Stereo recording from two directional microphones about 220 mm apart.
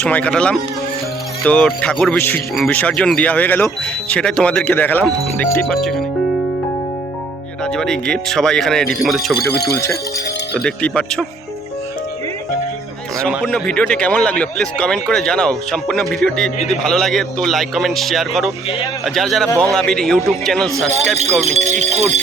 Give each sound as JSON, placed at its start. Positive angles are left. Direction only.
{"t": 0.0, "sound": "speech", "side_deg": 5}
{"t": 7.6, "sound": "speech", "side_deg": 5}
{"t": 9.4, "sound": "speech", "side_deg": 45}
{"t": 9.7, "sound": "speech", "side_deg": 15}
{"t": 13.2, "sound": "speech", "side_deg": 5}
{"t": 21.4, "sound": "speech", "side_deg": -30}